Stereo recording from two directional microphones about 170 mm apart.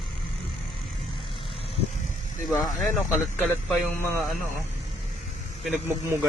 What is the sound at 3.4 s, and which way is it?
Speech, 10° left (ahead or behind).